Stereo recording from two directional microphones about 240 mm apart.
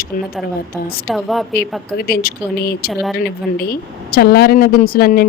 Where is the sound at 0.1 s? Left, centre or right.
Left.